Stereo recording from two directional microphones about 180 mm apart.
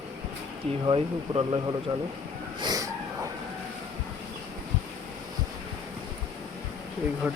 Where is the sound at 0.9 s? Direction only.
30° right (ahead or behind).